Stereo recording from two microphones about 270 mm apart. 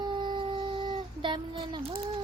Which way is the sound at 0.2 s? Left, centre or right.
Centre.